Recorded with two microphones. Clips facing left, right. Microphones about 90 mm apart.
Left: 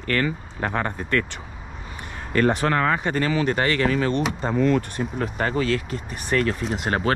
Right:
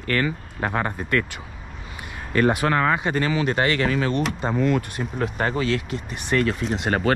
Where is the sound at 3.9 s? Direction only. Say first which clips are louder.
Left 1 dB; 40° left (ahead or behind).